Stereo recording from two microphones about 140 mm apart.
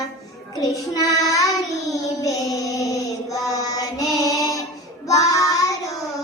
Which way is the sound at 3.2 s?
25° left (ahead or behind).